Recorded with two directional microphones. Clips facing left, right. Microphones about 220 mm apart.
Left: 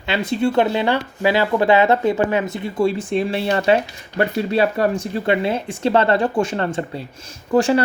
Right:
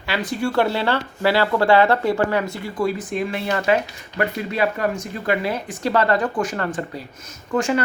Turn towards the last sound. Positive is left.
turn(degrees=30)  # may be behind; listen again after turning